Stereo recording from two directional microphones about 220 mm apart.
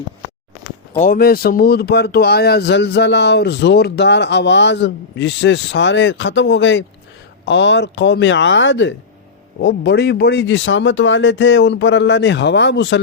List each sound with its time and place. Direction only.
0.9 s speech: 40° left (ahead or behind)